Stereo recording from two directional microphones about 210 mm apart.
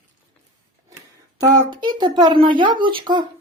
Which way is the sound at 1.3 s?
15° right (ahead or behind).